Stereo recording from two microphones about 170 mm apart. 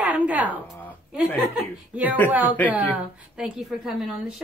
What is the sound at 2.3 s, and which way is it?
A woman's voice, 10° right (ahead or behind).